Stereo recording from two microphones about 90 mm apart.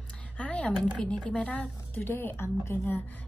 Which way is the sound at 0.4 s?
10° left (ahead or behind).